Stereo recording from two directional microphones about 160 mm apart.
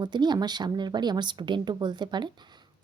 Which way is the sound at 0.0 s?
25° right (ahead or behind).